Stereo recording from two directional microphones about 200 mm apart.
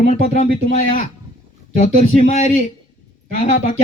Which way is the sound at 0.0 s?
30° left (ahead or behind).